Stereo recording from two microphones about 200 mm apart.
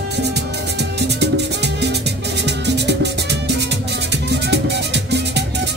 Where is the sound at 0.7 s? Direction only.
55° right (ahead or behind).